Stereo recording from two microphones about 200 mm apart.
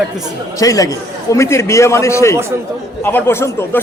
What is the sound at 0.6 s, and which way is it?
A man's voice, 20° left (ahead or behind).